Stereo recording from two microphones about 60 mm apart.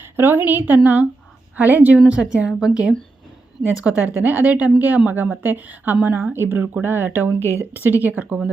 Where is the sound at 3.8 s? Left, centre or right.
Right.